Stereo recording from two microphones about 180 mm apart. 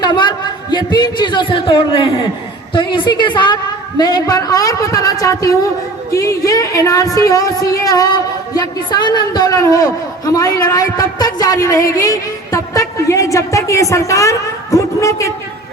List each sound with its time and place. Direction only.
0.0 s a woman's voice: 25° left (ahead or behind)